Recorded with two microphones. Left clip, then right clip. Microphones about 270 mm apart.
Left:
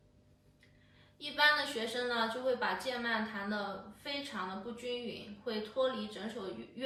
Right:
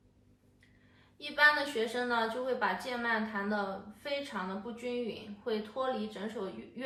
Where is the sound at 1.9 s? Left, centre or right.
Centre.